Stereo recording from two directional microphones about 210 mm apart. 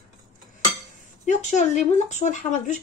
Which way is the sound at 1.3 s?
35° left (ahead or behind).